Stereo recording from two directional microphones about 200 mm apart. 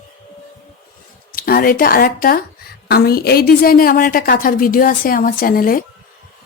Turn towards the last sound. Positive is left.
turn(degrees=45)  # may be behind; listen again after turning